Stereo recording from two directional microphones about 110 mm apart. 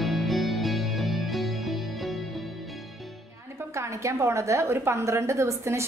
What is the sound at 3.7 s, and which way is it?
A woman's voice, 25° right (ahead or behind).